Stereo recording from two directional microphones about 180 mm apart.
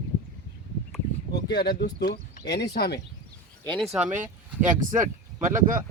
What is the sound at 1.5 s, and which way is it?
Speech, 65° left (ahead or behind).